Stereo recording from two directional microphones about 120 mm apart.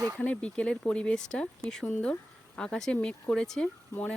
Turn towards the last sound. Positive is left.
turn(degrees=10)  # may be behind; listen again after turning